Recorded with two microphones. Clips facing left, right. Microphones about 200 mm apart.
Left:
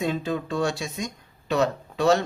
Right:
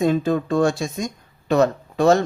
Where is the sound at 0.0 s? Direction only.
45° right (ahead or behind).